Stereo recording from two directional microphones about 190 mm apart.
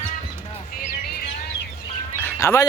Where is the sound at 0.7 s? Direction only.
45° left (ahead or behind).